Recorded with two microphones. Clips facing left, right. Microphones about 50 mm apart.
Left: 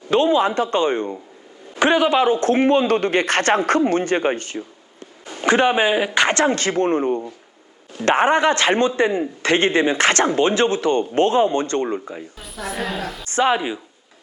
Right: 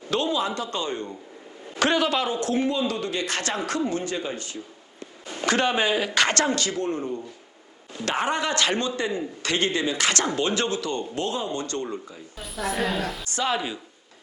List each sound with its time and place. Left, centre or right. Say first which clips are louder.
0.1 s a man's voice: left 8 dB; left
1.7 s a man's voice: left 6 dB; left
5.2 s speech: left 6 dB; left
6.6 s a man's voice: left 8 dB; left
8.0 s a man's voice: left 9 dB; left
12.4 s a woman's voice: right 2 dB; centre
13.2 s a woman's voice: left 11 dB; left